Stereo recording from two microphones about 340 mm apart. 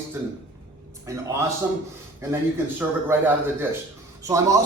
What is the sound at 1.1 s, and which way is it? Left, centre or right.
Speech, centre.